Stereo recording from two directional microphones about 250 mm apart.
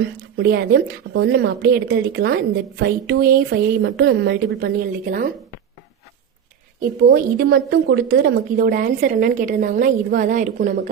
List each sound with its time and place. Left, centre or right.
0.3 s a woman's voice: right
7.0 s a woman's voice: right